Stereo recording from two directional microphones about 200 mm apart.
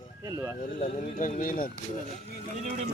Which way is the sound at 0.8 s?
35° left (ahead or behind).